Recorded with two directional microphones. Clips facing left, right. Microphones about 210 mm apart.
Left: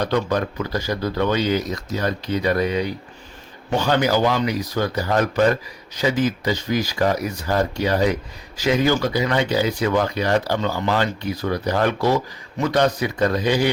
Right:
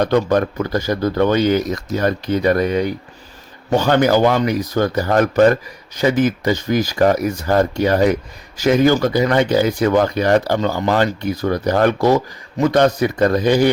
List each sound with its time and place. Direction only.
0.0 s speech: 50° right (ahead or behind)